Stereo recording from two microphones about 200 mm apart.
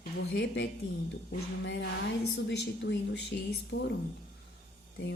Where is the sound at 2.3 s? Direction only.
60° left (ahead or behind).